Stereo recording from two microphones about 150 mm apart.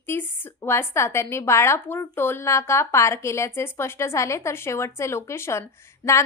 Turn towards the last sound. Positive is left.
turn(degrees=20)  # may be behind; listen again after turning